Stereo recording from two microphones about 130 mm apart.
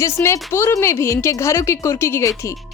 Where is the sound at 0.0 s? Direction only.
20° left (ahead or behind).